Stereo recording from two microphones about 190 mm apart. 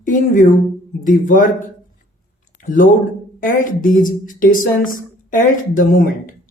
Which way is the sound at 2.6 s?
45° left (ahead or behind).